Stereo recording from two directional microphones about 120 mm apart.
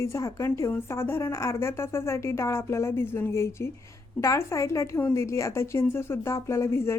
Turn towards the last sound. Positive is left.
turn(degrees=20)  # may be behind; listen again after turning